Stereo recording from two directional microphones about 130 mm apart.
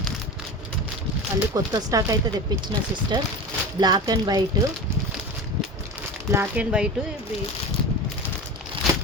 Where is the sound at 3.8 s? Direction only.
30° right (ahead or behind).